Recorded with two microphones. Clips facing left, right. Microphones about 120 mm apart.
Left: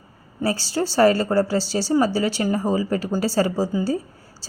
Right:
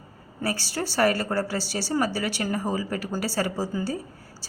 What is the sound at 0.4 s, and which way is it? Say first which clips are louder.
A woman's voice: left 6 dB; 25° left (ahead or behind).